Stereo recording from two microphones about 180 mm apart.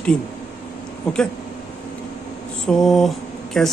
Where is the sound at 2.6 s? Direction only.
Centre (ahead or behind).